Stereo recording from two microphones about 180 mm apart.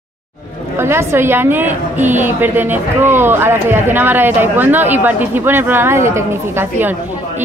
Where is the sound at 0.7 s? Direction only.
15° right (ahead or behind).